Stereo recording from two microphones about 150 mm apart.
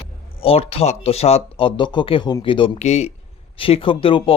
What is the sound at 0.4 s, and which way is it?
Speech, 40° left (ahead or behind).